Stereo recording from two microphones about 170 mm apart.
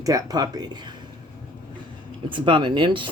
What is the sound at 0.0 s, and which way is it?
Speech, 20° right (ahead or behind).